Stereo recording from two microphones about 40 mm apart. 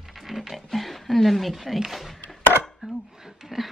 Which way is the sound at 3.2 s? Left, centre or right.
Centre.